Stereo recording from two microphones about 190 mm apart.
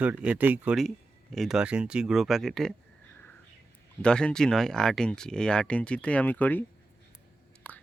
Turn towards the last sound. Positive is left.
turn(degrees=5)  # may be behind; listen again after turning